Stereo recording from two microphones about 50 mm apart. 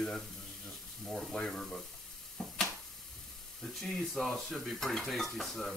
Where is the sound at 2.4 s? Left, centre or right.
Centre.